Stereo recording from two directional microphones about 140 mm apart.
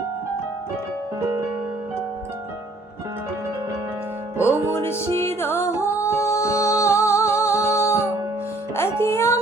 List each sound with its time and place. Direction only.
4.7 s music: 20° left (ahead or behind)